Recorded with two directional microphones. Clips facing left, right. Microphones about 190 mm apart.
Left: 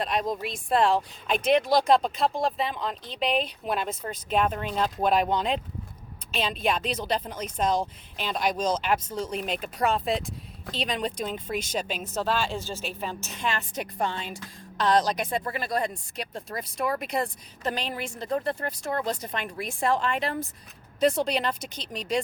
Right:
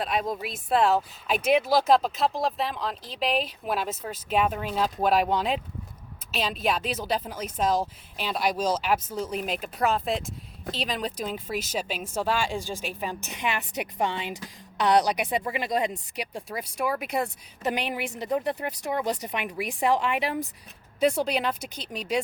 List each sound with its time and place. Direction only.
0.0 s speech: 5° right (ahead or behind)
17.6 s speech: 15° right (ahead or behind)